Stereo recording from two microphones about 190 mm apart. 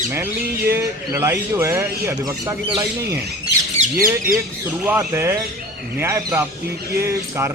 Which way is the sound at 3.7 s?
40° right (ahead or behind).